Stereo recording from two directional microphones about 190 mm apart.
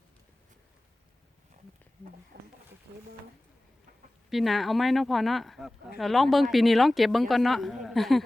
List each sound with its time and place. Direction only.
2.3 s speech: 55° right (ahead or behind)
4.3 s speech: centre (ahead or behind)